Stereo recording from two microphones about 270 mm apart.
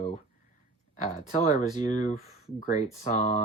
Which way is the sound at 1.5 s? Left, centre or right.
Left.